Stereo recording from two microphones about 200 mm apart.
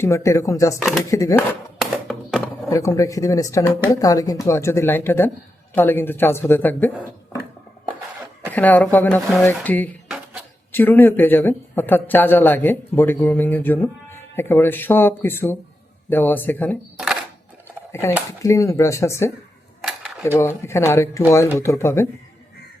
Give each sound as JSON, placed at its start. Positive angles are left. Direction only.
{"t": 0.0, "sound": "speech", "side_deg": 15}
{"t": 1.4, "sound": "a sound", "side_deg": 0}
{"t": 2.6, "sound": "speech", "side_deg": 15}
{"t": 8.5, "sound": "speech", "side_deg": 10}
{"t": 18.3, "sound": "speech", "side_deg": 15}